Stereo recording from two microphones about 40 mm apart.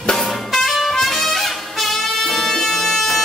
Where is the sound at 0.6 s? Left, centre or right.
Centre.